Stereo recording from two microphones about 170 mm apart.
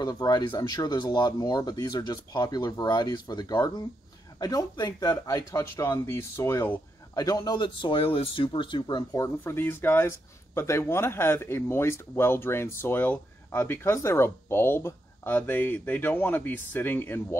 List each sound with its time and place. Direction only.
0.0 s speech: 25° left (ahead or behind)